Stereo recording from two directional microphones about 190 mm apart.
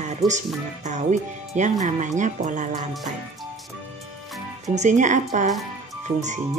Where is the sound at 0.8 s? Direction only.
40° right (ahead or behind).